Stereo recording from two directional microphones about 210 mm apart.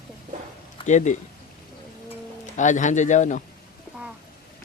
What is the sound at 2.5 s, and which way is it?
Speech, 35° left (ahead or behind).